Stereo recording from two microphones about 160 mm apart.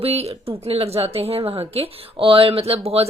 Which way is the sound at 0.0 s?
40° right (ahead or behind).